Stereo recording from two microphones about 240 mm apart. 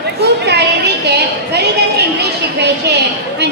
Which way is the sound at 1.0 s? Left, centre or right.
Right.